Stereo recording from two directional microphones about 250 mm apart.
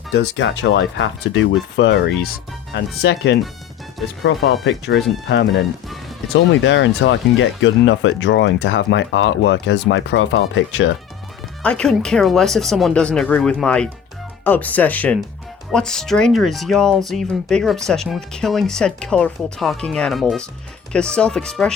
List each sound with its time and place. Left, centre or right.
0.1 s speech: left
11.6 s speech: centre